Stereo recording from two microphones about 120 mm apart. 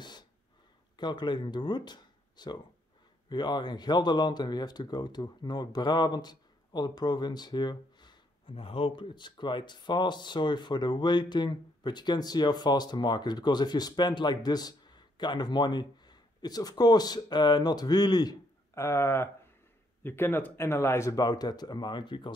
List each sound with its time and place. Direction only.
0.9 s speech: 40° left (ahead or behind)